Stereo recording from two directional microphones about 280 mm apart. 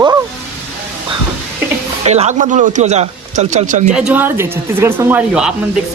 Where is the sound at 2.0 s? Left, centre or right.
Right.